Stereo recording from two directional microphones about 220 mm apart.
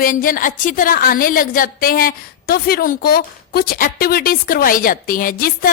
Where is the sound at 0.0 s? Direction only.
40° left (ahead or behind).